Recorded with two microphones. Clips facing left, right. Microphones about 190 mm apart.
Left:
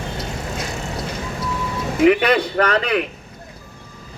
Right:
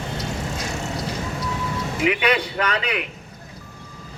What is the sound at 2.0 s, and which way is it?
Speech, 45° left (ahead or behind).